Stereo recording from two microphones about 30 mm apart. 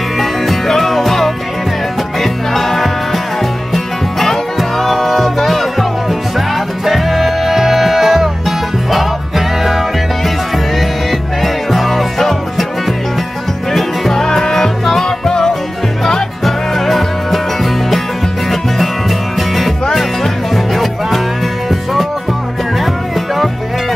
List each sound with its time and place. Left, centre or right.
0.2 s music: centre
10.8 s music: centre
13.7 s music: centre
15.0 s music: centre
16.4 s music: centre
18.5 s music: centre
22.8 s music: centre